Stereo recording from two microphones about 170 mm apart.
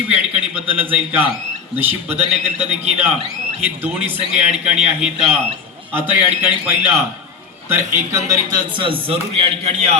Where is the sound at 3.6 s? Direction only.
10° right (ahead or behind).